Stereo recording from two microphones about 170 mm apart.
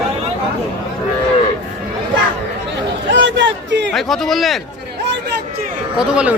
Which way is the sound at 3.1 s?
90° right.